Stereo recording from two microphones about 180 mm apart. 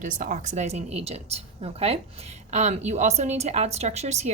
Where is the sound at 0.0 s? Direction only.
45° right (ahead or behind).